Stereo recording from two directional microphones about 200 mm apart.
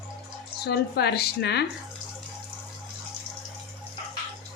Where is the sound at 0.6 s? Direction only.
55° left (ahead or behind).